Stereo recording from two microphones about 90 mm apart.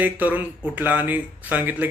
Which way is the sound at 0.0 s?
20° right (ahead or behind).